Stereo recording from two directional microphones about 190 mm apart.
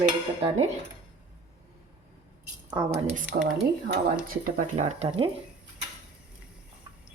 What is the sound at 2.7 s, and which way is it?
Speech, 30° right (ahead or behind).